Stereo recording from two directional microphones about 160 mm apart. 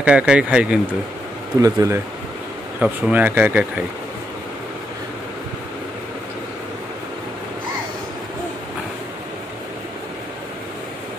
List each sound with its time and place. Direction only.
0.0 s speech: 5° right (ahead or behind)
1.6 s speech: 20° right (ahead or behind)
2.8 s speech: 10° right (ahead or behind)